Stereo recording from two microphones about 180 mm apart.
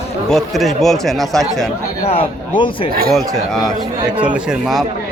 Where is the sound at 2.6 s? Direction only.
30° left (ahead or behind).